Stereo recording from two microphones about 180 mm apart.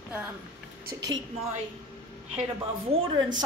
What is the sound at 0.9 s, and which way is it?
Speech, 20° right (ahead or behind).